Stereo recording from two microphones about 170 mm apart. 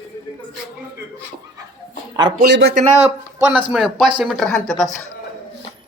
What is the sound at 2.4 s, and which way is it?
Speech, 80° right.